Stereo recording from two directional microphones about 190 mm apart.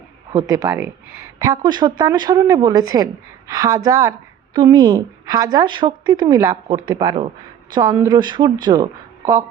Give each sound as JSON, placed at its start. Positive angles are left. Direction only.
{"t": 0.3, "sound": "speech", "side_deg": -15}